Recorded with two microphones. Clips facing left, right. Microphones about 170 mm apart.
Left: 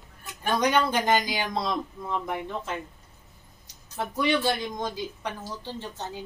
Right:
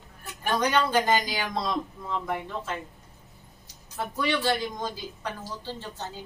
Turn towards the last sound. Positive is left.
turn(degrees=20)  # may be behind; listen again after turning